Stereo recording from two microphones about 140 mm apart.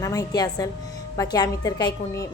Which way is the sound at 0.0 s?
25° left (ahead or behind).